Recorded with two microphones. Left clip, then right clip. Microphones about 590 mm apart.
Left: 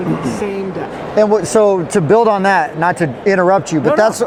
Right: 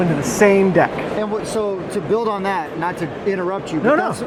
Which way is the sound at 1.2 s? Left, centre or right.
Left.